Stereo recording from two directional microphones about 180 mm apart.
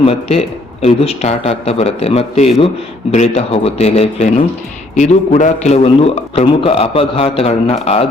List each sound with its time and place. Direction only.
0.0 s a man's voice: 35° left (ahead or behind)